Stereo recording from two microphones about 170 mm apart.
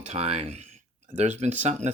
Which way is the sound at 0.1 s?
40° right (ahead or behind).